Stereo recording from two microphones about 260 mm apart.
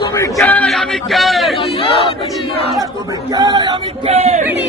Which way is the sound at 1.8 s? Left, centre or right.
Left.